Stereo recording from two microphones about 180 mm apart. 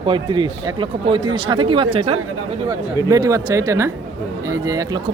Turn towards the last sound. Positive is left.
turn(degrees=-20)  # may be behind; listen again after turning